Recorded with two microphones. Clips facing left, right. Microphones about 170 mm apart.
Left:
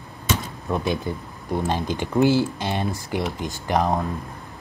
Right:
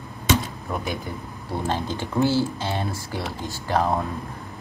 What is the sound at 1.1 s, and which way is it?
Speech, 25° left (ahead or behind).